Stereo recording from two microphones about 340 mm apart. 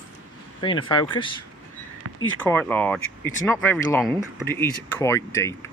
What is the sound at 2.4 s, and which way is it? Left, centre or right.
Speech, centre.